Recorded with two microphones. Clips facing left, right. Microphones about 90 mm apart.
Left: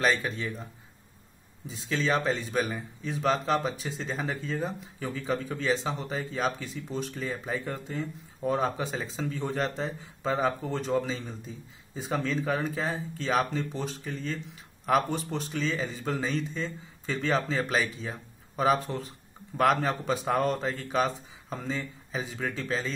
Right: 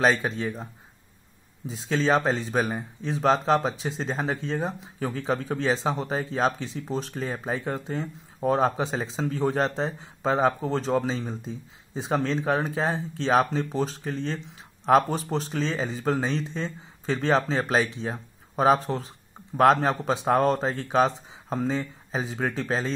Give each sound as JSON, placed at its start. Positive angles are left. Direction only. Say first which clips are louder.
{"t": 0.0, "sound": "speech", "louder": "right 4 dB", "side_deg": -35}
{"t": 1.7, "sound": "speech", "louder": "right 5 dB", "side_deg": -35}
{"t": 18.0, "sound": "a sound", "louder": "right 6 dB", "side_deg": -35}
{"t": 19.7, "sound": "speech", "louder": "right 4 dB", "side_deg": -35}